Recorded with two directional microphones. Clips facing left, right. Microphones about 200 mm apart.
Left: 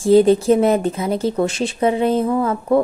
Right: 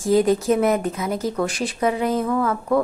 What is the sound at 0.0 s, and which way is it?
Speech, 30° left (ahead or behind).